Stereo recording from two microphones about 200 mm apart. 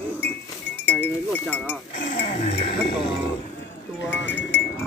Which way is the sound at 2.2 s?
35° left (ahead or behind).